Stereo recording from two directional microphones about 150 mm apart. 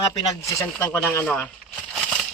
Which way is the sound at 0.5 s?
10° left (ahead or behind).